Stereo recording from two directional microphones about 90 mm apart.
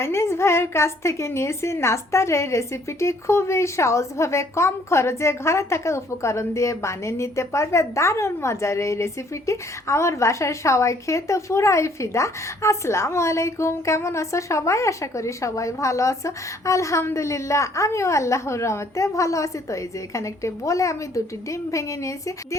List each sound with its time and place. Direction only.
0.0 s a woman's voice: 30° left (ahead or behind)